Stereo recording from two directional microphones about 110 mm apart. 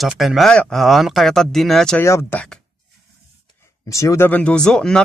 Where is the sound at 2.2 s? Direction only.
10° left (ahead or behind).